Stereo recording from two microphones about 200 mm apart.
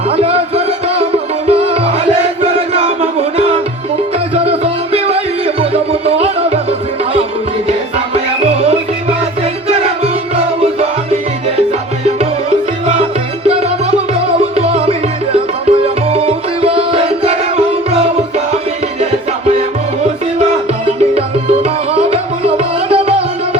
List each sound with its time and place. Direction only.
0.1 s music: 30° right (ahead or behind)
2.4 s chant: 30° right (ahead or behind)
4.4 s music: 30° right (ahead or behind)
14.1 s music: 30° right (ahead or behind)
20.8 s music: 30° right (ahead or behind)